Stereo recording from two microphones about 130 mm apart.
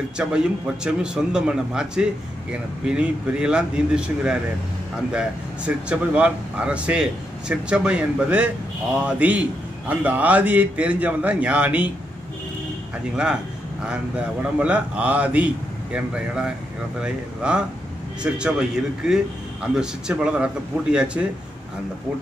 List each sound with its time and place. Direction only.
0.2 s speech: 10° right (ahead or behind)
13.1 s speech: 5° right (ahead or behind)
14.6 s speech: 10° right (ahead or behind)